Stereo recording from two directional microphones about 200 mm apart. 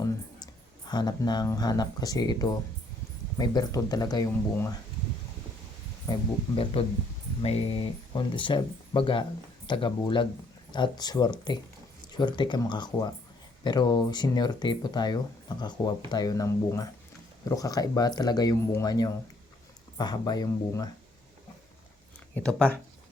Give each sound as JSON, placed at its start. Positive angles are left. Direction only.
{"t": 0.0, "sound": "speech", "side_deg": 20}
{"t": 6.6, "sound": "speech", "side_deg": 30}
{"t": 22.4, "sound": "speech", "side_deg": 5}